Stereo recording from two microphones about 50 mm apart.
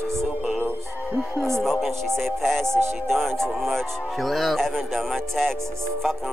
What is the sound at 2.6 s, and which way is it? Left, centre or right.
Music, right.